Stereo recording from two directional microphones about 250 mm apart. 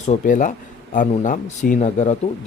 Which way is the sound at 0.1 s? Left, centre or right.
Left.